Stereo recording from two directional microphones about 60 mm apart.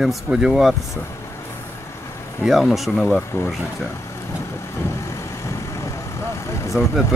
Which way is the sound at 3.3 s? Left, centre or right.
Left.